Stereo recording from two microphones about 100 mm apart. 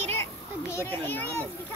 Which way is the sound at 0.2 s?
25° left (ahead or behind).